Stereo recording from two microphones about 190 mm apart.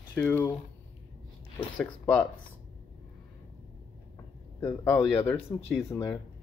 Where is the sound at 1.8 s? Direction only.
5° left (ahead or behind).